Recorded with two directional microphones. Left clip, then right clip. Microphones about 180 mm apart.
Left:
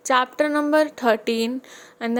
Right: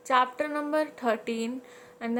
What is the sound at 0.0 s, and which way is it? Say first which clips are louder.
A woman's voice: left 5 dB; 50° left (ahead or behind).